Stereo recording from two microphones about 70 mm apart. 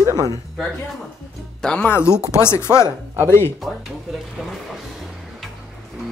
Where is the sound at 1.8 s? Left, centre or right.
Left.